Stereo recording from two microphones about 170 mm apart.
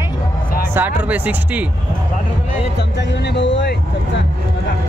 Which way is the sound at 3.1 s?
90° left.